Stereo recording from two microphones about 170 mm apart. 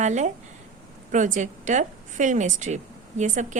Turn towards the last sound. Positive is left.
turn(degrees=-45)  # may be behind; listen again after turning